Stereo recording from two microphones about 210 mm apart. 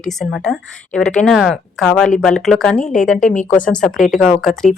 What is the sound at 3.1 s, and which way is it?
Speech, 35° left (ahead or behind).